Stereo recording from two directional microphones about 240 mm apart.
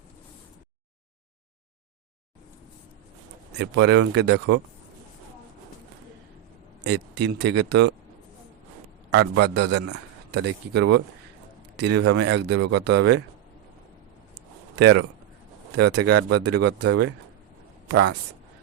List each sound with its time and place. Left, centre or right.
3.5 s speech: right
6.8 s speech: right
9.0 s a man's voice: right
14.8 s a man's voice: right
15.7 s a man's voice: right